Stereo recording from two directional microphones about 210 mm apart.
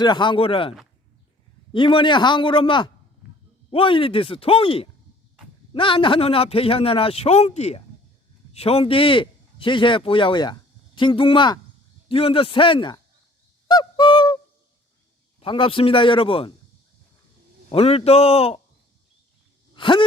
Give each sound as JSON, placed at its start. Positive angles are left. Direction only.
{"t": 0.0, "sound": "a man's voice", "side_deg": 20}
{"t": 1.7, "sound": "a man's voice", "side_deg": 25}
{"t": 13.7, "sound": "honk", "side_deg": 20}
{"t": 15.4, "sound": "a man's voice", "side_deg": 25}
{"t": 17.7, "sound": "a man's voice", "side_deg": 30}
{"t": 19.7, "sound": "a sound", "side_deg": 25}